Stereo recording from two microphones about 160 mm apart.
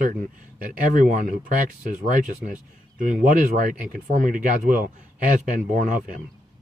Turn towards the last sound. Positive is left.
turn(degrees=-55)  # may be behind; listen again after turning